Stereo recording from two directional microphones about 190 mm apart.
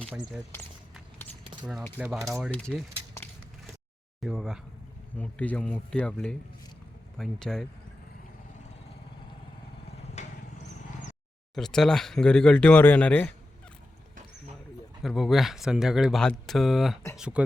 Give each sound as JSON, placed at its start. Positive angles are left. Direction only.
{"t": 0.1, "sound": "speech", "side_deg": 0}
{"t": 2.0, "sound": "a man's voice", "side_deg": -5}
{"t": 10.2, "sound": "vehicle", "side_deg": 40}
{"t": 11.5, "sound": "speech", "side_deg": 0}
{"t": 15.0, "sound": "speech", "side_deg": 0}